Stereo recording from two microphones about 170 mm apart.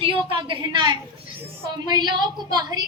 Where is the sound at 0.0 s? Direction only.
30° right (ahead or behind).